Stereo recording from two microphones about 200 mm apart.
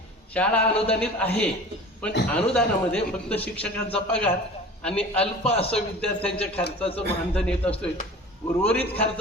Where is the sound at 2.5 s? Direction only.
5° left (ahead or behind).